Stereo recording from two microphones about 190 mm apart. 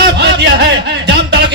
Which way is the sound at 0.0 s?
60° right (ahead or behind).